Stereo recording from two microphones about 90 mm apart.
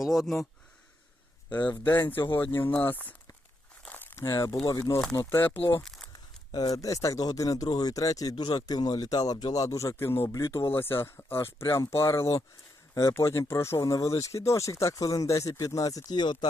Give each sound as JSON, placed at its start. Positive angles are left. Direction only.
{"t": 0.0, "sound": "speech", "side_deg": -5}
{"t": 2.0, "sound": "speech", "side_deg": 25}
{"t": 2.2, "sound": "speech", "side_deg": 60}
{"t": 2.8, "sound": "speech", "side_deg": 20}
{"t": 3.8, "sound": "crumpling", "side_deg": 20}
{"t": 4.8, "sound": "speech", "side_deg": 25}
{"t": 5.5, "sound": "speech", "side_deg": 75}
{"t": 6.7, "sound": "speech", "side_deg": 40}